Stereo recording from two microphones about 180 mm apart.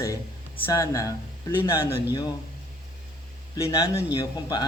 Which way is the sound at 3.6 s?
20° left (ahead or behind).